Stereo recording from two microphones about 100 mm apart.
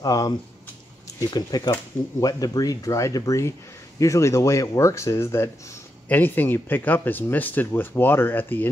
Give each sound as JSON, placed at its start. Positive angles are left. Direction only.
{"t": 0.0, "sound": "speech", "side_deg": 40}